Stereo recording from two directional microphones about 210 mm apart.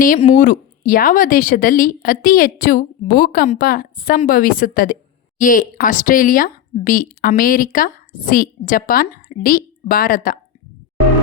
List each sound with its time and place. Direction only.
0.0 s speech: 40° left (ahead or behind)